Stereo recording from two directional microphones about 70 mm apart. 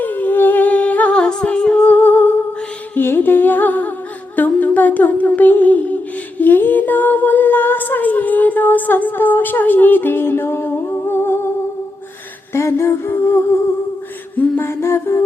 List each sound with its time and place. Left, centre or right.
0.0 s humming: left
12.5 s music: left